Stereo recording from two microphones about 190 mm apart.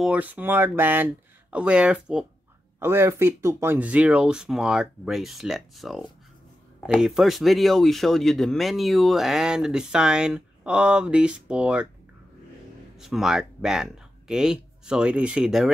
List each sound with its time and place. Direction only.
0.0 s speech: 10° right (ahead or behind)
13.0 s speech: centre (ahead or behind)